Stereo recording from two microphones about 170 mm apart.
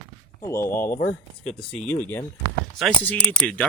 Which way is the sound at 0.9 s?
50° left (ahead or behind).